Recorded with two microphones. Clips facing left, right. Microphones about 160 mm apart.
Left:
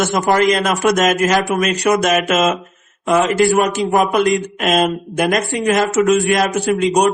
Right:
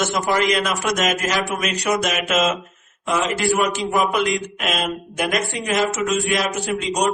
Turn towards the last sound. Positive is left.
turn(degrees=60)  # may be behind; listen again after turning